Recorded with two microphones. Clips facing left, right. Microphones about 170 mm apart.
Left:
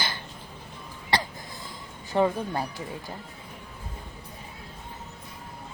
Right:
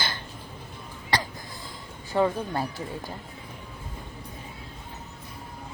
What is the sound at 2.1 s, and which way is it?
Speech, 15° left (ahead or behind).